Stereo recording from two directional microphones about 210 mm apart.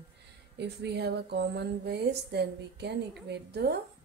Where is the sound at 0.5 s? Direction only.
55° right (ahead or behind).